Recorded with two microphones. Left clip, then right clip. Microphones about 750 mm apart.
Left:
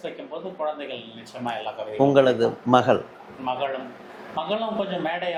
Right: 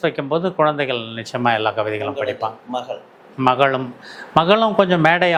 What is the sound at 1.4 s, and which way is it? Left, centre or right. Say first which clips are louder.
Speech: right 12 dB; right.